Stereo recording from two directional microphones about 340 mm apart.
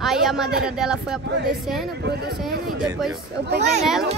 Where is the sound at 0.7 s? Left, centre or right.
Centre.